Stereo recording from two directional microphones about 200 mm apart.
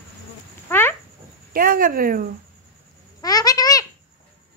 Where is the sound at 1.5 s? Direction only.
45° right (ahead or behind).